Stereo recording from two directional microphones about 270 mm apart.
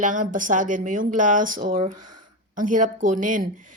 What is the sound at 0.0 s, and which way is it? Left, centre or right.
A woman's voice, right.